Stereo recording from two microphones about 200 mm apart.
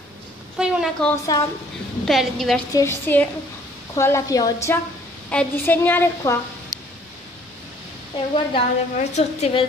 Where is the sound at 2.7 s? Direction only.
15° left (ahead or behind).